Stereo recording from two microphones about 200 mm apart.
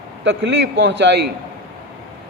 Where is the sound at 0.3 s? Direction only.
60° right (ahead or behind).